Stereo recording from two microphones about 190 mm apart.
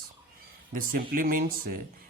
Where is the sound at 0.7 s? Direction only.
45° right (ahead or behind).